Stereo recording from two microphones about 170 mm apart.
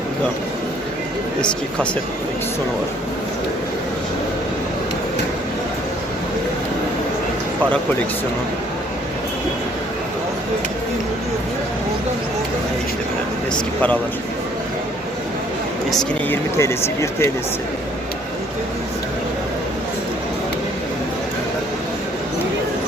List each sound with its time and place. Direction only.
16.3 s speech: 15° left (ahead or behind)